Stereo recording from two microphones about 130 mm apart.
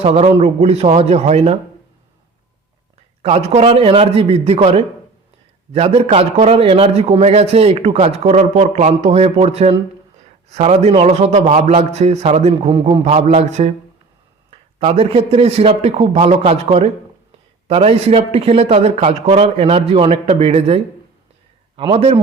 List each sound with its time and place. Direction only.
0.0 s a man's voice: 55° right (ahead or behind)
3.2 s a man's voice: 55° right (ahead or behind)
14.5 s a man's voice: 50° right (ahead or behind)